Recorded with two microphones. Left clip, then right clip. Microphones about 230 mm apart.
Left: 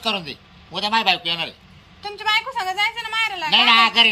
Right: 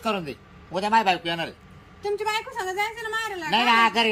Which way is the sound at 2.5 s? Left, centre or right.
Centre.